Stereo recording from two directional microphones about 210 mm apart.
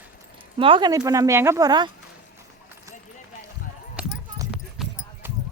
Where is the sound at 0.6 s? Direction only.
20° right (ahead or behind).